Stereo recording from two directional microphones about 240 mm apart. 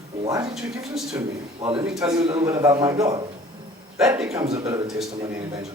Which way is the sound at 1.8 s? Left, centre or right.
Centre.